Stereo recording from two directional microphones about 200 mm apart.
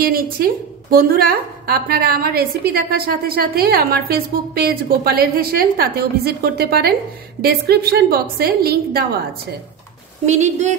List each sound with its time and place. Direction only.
0.0 s a woman's voice: 50° right (ahead or behind)
10.2 s speech: 35° right (ahead or behind)